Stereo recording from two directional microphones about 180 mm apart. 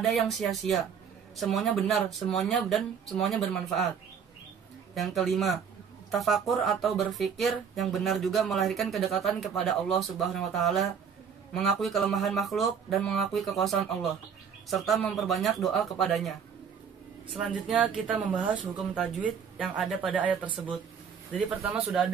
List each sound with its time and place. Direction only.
0.0 s speech: centre (ahead or behind)
4.9 s speech: centre (ahead or behind)
17.6 s speech: 5° right (ahead or behind)
20.4 s speech: 25° right (ahead or behind)
21.6 s speech: 10° right (ahead or behind)